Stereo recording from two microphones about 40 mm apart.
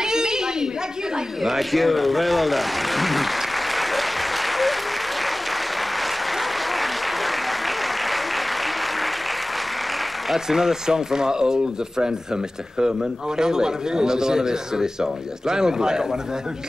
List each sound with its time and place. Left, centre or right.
0.0 s a sound: centre
1.4 s applause: centre
5.9 s applause: centre
10.3 s speech: centre
13.4 s speech: centre